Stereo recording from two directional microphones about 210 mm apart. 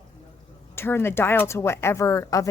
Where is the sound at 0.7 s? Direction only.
10° left (ahead or behind).